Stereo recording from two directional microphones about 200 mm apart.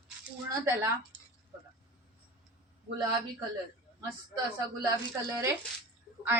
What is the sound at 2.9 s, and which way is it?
Speech, 20° right (ahead or behind).